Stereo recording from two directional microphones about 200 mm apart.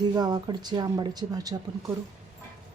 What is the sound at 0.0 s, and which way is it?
Speech, 20° right (ahead or behind).